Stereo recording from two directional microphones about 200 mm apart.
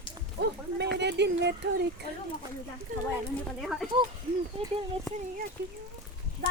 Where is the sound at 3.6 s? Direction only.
Centre (ahead or behind).